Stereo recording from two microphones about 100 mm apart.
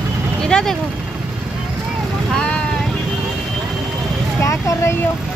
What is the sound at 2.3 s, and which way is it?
Boat, 10° left (ahead or behind).